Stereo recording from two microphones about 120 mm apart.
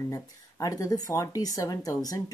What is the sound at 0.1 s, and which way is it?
Speech, 30° left (ahead or behind).